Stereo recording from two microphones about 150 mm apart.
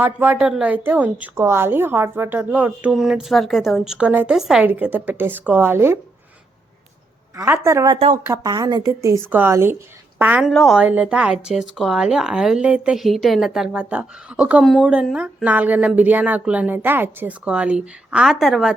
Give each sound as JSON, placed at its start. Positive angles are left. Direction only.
{"t": 0.0, "sound": "a woman's voice", "side_deg": -10}
{"t": 7.3, "sound": "a woman's voice", "side_deg": -20}
{"t": 10.5, "sound": "a woman's voice", "side_deg": 0}